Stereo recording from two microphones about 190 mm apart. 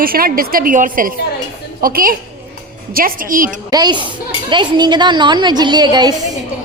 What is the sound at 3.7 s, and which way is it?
A woman's voice, 20° right (ahead or behind).